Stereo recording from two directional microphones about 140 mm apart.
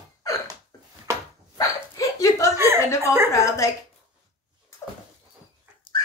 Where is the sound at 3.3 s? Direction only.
20° left (ahead or behind).